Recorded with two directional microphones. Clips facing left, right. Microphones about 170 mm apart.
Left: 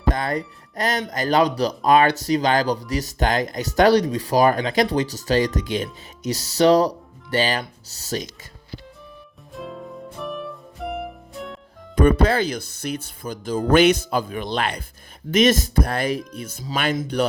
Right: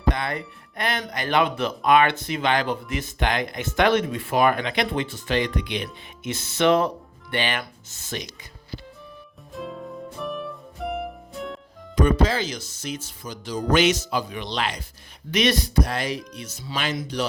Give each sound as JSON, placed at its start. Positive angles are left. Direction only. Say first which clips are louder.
{"t": 0.1, "sound": "speech", "louder": "left 3 dB", "side_deg": 40}
{"t": 9.5, "sound": "music", "louder": "even", "side_deg": 0}
{"t": 12.0, "sound": "speech", "louder": "left 5 dB", "side_deg": 60}